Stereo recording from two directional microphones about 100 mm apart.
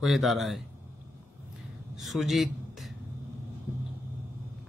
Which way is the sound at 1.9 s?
Centre (ahead or behind).